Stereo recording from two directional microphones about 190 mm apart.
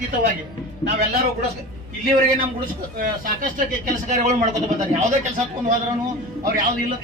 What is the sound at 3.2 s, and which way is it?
Speech, 45° right (ahead or behind).